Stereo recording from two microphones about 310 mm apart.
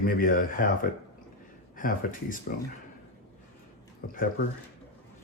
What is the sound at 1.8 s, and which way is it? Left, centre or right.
Speech, left.